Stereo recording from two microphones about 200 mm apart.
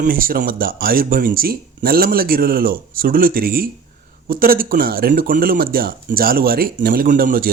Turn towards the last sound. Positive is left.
turn(degrees=-45)  # may be behind; listen again after turning